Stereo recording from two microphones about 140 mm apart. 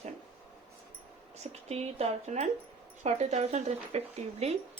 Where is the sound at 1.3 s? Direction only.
50° right (ahead or behind).